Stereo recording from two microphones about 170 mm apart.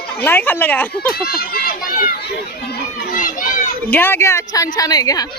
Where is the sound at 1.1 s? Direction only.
65° left (ahead or behind).